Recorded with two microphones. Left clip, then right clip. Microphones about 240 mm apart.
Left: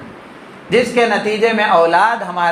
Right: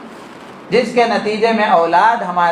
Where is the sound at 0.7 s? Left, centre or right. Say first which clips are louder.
Even; left.